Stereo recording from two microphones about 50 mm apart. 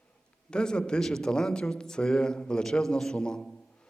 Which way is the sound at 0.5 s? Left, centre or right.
Centre.